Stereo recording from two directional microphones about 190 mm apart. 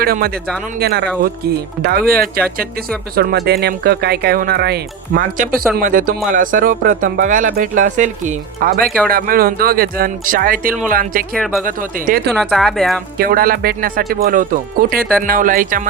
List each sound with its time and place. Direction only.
0.0 s speech: 50° right (ahead or behind)
12.3 s speech: centre (ahead or behind)
13.1 s speech: 50° right (ahead or behind)